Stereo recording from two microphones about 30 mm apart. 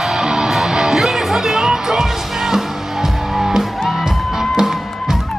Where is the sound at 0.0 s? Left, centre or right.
Centre.